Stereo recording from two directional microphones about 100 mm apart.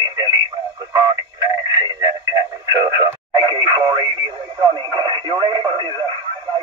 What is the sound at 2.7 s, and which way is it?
Speech, 40° right (ahead or behind).